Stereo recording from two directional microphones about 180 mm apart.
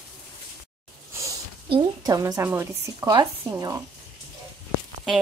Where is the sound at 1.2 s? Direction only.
25° right (ahead or behind).